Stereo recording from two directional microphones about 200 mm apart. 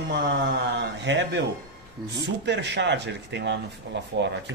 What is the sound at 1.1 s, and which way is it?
Speech, 60° right (ahead or behind).